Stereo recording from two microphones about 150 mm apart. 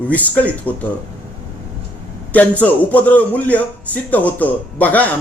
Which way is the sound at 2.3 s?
10° left (ahead or behind).